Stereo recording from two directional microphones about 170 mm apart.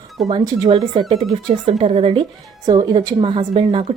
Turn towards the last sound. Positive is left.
turn(degrees=-35)  # may be behind; listen again after turning